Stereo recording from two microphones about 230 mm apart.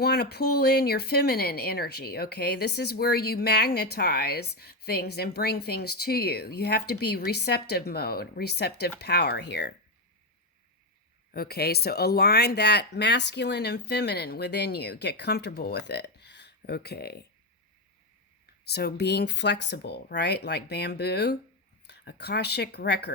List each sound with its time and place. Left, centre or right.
0.0 s speech: left
11.3 s speech: left
18.7 s speech: left